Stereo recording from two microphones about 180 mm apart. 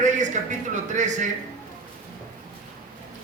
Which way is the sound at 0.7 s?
45° right (ahead or behind).